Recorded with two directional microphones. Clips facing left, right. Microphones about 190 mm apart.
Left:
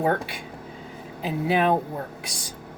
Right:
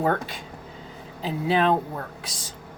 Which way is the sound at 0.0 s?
15° left (ahead or behind).